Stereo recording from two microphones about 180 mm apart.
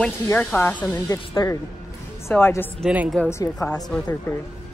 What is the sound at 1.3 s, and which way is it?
A man's voice, 20° left (ahead or behind).